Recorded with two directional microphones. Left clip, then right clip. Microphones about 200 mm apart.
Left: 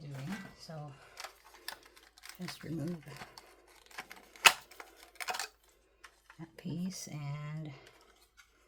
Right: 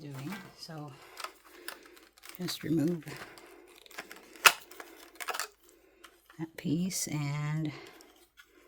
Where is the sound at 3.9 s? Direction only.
20° right (ahead or behind).